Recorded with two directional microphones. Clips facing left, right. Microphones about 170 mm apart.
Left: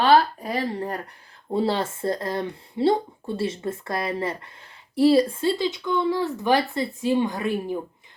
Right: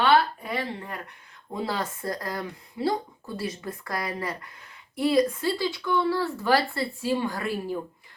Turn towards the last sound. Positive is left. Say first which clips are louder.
# left 3 dB
turn(degrees=20)  # may be behind; listen again after turning